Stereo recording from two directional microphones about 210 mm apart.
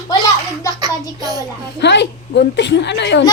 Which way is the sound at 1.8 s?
55° left (ahead or behind).